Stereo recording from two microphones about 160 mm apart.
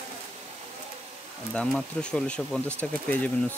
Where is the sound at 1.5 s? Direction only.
5° left (ahead or behind).